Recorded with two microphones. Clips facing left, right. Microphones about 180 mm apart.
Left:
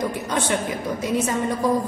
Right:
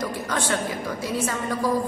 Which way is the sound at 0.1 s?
20° left (ahead or behind).